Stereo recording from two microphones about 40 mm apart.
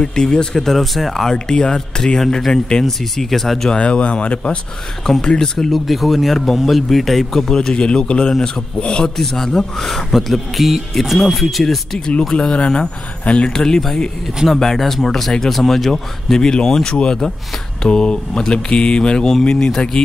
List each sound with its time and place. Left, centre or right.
0.0 s speech: left
0.6 s speech: centre
1.3 s speech: centre
2.8 s speech: centre
3.7 s speech: left
5.2 s speech: centre
5.6 s speech: centre; by 8.3 s left
8.3 s speech: centre
8.7 s speech: left
9.1 s speech: centre
12.5 s speech: left
13.6 s speech: centre
14.8 s speech: centre; by 19.7 s left